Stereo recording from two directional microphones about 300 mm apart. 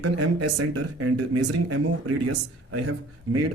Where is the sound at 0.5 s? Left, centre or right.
Right.